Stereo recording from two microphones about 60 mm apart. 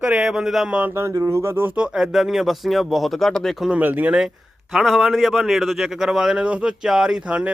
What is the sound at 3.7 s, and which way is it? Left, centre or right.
Speech, right.